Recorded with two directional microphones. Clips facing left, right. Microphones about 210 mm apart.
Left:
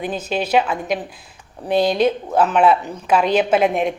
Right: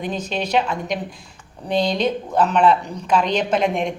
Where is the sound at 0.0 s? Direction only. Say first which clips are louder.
Left 2 dB; 5° left (ahead or behind).